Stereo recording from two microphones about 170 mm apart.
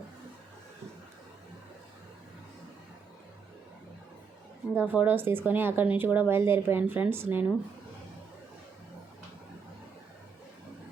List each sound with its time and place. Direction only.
4.7 s speech: 10° right (ahead or behind)